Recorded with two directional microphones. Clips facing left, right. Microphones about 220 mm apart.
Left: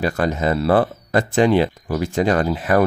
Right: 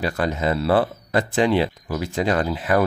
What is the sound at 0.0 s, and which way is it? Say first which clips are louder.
Speech: left 3 dB; 50° left (ahead or behind).